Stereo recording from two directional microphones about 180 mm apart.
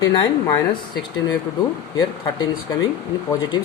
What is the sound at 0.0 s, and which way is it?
Speech, 20° left (ahead or behind).